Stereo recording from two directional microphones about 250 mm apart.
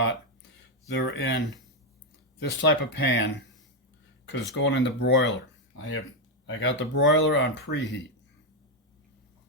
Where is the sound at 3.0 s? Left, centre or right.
Left.